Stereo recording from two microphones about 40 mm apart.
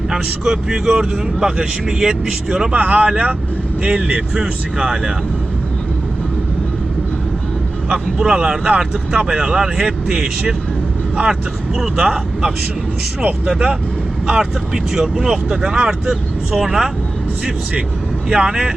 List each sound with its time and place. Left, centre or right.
0.1 s speech: centre
2.7 s speech: right
7.9 s speech: right
11.2 s speech: right
11.9 s speech: centre
13.4 s speech: right
14.3 s speech: centre
18.3 s speech: right